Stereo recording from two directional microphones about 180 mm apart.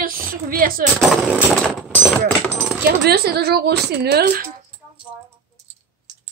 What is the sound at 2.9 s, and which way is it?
Speech, 60° right (ahead or behind).